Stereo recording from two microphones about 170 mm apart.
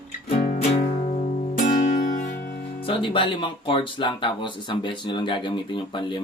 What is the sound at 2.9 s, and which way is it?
Speech, 30° left (ahead or behind).